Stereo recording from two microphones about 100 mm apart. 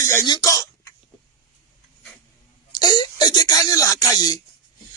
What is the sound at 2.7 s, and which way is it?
Speech, 45° left (ahead or behind).